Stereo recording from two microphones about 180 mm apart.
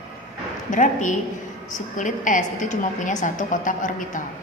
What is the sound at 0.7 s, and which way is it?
A woman's voice, 45° left (ahead or behind).